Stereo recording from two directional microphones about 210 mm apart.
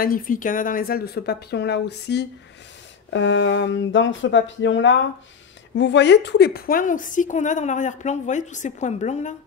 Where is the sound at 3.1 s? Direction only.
65° left (ahead or behind); by 9.3 s 35° left (ahead or behind).